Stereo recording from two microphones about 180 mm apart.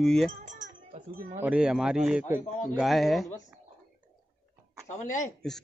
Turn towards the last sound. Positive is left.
turn(degrees=5)  # may be behind; listen again after turning